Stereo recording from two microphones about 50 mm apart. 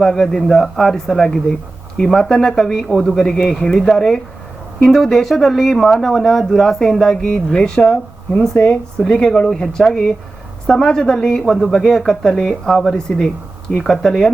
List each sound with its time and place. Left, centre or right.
0.0 s speech: centre
8.6 s speech: left
9.1 s speech: centre